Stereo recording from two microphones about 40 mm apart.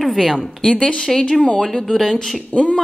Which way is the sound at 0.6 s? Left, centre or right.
Left.